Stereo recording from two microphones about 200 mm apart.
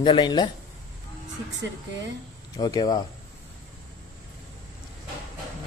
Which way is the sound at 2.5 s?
20° left (ahead or behind).